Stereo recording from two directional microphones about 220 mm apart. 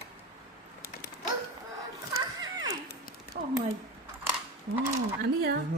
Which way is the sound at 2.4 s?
20° right (ahead or behind).